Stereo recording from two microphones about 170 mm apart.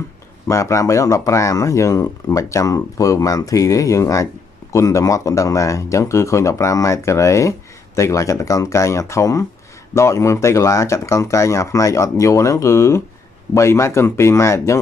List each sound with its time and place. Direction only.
0.5 s speech: 15° left (ahead or behind)